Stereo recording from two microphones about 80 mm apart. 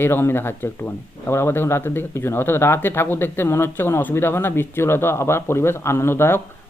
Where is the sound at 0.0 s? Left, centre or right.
Left.